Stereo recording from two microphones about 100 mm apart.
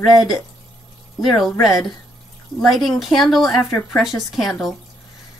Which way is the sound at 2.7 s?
Centre (ahead or behind).